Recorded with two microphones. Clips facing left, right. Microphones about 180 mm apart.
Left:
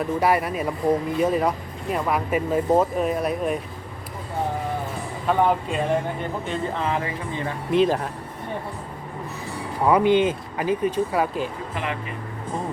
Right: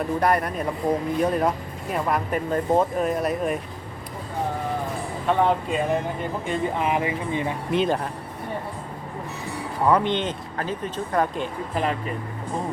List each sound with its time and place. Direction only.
0.0 s speech: 5° left (ahead or behind)
5.5 s speech: centre (ahead or behind)
6.5 s speech: 15° right (ahead or behind)
7.7 s speech: centre (ahead or behind)
9.8 s speech: 10° left (ahead or behind)
11.7 s speech: 40° right (ahead or behind)